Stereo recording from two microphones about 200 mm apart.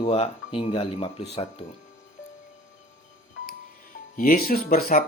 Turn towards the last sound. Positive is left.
turn(degrees=50)  # may be behind; listen again after turning